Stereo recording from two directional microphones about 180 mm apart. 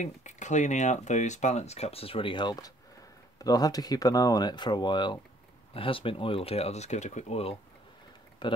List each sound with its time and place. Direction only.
0.0 s speech: 40° left (ahead or behind)
8.4 s speech: 25° left (ahead or behind)